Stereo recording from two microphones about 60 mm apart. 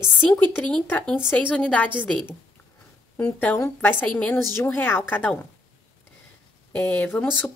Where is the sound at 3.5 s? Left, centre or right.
Left.